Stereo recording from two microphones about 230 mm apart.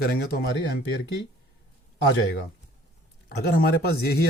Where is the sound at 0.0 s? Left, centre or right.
Left.